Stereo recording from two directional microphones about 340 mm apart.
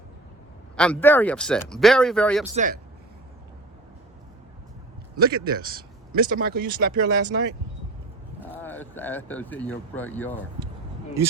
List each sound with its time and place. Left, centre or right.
0.8 s speech: centre
2.6 s speech: right
5.1 s speech: right
8.6 s speech: centre